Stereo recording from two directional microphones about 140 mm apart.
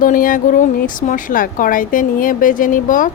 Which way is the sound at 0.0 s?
75° left (ahead or behind).